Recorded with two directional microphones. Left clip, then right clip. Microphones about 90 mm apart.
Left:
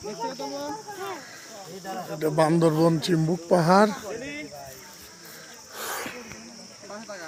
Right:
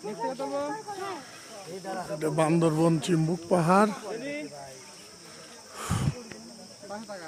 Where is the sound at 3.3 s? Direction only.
20° left (ahead or behind).